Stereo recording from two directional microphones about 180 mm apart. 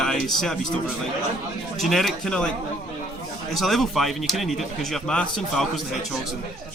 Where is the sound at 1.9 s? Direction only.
Centre (ahead or behind).